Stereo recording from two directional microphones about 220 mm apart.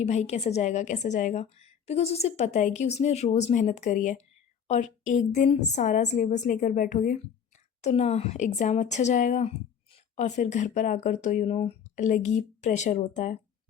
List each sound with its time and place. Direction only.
0.0 s a woman's voice: 30° left (ahead or behind)